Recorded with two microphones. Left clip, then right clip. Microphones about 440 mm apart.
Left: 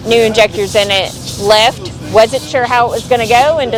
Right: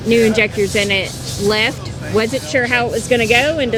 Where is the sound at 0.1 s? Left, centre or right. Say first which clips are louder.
Left 5 dB; left.